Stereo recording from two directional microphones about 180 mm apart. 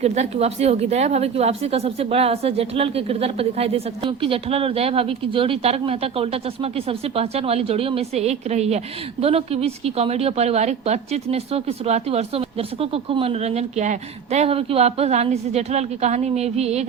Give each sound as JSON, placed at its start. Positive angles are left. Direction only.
{"t": 0.0, "sound": "a woman's voice", "side_deg": -35}